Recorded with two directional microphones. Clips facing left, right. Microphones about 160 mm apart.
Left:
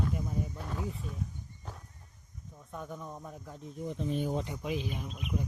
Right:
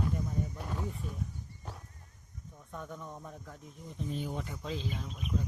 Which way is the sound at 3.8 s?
75° left (ahead or behind).